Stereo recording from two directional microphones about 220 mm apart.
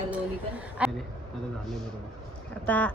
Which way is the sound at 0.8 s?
5° right (ahead or behind).